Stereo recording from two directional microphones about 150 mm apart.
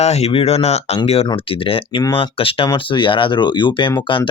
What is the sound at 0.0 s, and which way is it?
Speech, 45° left (ahead or behind).